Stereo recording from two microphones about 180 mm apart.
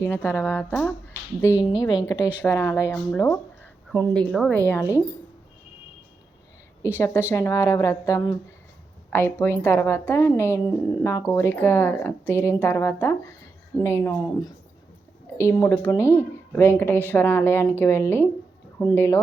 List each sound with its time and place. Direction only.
0.0 s a woman's voice: 15° left (ahead or behind)
7.3 s speech: 15° left (ahead or behind)